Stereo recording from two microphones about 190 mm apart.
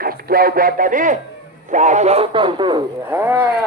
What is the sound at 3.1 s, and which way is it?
Speech, 10° right (ahead or behind).